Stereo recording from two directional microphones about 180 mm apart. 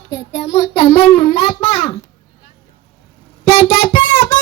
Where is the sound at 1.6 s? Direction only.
30° left (ahead or behind).